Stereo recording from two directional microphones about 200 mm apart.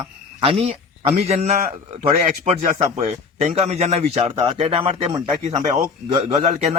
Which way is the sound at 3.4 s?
30° right (ahead or behind).